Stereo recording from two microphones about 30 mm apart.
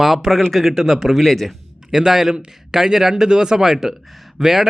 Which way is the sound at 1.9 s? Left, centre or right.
Centre.